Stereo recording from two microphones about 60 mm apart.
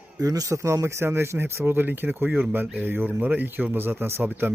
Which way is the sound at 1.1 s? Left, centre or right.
Right.